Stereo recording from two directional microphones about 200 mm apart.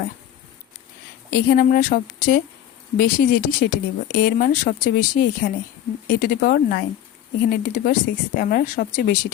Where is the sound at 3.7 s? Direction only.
45° left (ahead or behind).